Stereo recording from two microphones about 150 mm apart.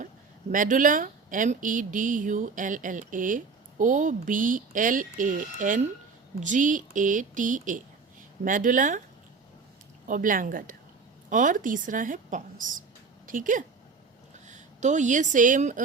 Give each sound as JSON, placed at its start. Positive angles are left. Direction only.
{"t": 0.5, "sound": "speech", "side_deg": -60}
{"t": 10.1, "sound": "speech", "side_deg": -65}